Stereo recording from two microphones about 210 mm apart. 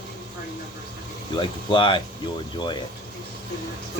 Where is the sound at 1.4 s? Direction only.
25° left (ahead or behind).